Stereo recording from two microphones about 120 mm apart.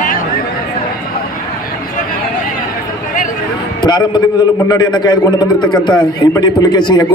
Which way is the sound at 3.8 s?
35° left (ahead or behind).